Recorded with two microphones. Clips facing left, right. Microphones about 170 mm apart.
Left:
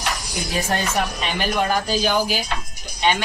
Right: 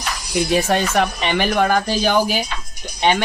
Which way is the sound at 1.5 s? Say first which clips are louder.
Right 1 dB; 55° right (ahead or behind).